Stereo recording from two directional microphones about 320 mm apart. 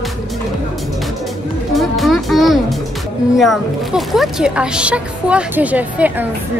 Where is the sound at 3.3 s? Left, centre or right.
Centre.